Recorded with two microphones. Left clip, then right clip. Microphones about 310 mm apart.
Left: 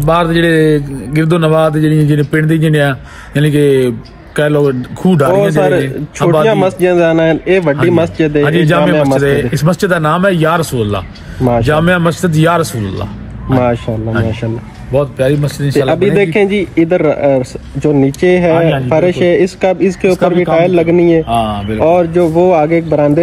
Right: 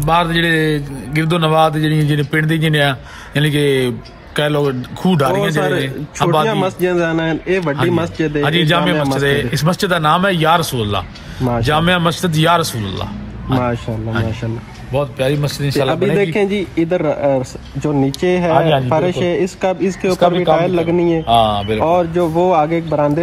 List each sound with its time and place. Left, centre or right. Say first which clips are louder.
0.0 s a man's voice: left 4 dB; centre
18.5 s a man's voice: left 2 dB; right
18.9 s a man's voice: left 6 dB; centre
20.2 s speech: right 1 dB; right
20.7 s a man's voice: left 6 dB; centre
21.3 s speech: right 2 dB; right
21.7 s speech: left 8 dB; centre